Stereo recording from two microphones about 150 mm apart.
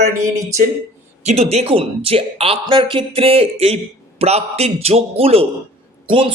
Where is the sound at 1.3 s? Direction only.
45° right (ahead or behind).